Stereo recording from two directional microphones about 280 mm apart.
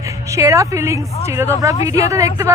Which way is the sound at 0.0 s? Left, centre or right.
Centre.